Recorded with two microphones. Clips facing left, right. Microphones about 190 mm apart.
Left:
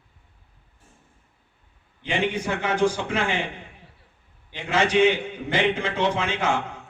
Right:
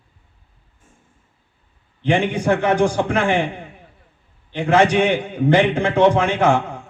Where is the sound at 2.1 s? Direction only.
65° right (ahead or behind).